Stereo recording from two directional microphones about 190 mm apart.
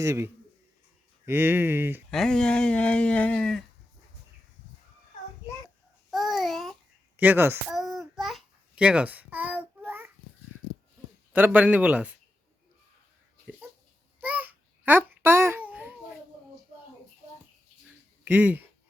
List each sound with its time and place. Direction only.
0.0 s speech: 15° right (ahead or behind)
2.0 s speech: 5° left (ahead or behind)
6.1 s babbling: centre (ahead or behind)
7.2 s speech: 10° right (ahead or behind)
7.7 s babbling: centre (ahead or behind)
11.3 s speech: 10° right (ahead or behind)
14.2 s babbling: 10° right (ahead or behind)
18.3 s speech: 10° right (ahead or behind)